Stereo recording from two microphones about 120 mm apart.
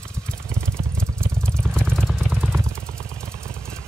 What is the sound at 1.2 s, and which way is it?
Vehicle, 20° right (ahead or behind).